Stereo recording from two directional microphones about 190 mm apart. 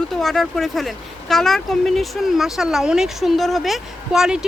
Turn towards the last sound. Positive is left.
turn(degrees=-5)  # may be behind; listen again after turning